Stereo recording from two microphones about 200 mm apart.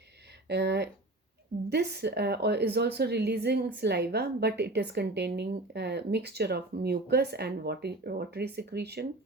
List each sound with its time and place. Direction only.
0.4 s speech: 55° right (ahead or behind)